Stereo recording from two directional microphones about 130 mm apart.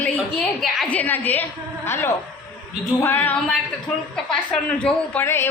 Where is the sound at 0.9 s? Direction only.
10° left (ahead or behind).